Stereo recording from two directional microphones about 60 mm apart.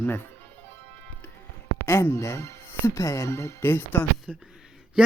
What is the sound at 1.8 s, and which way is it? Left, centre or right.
Speech, left.